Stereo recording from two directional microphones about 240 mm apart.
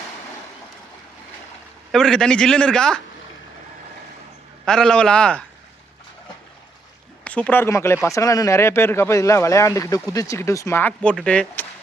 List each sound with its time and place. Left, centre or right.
1.9 s a man's voice: centre
4.6 s a man's voice: centre
7.3 s speech: centre